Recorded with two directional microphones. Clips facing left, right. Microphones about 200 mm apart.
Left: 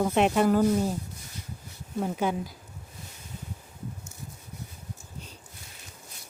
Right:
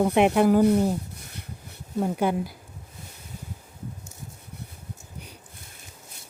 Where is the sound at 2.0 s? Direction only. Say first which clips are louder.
Right 4 dB; 10° right (ahead or behind).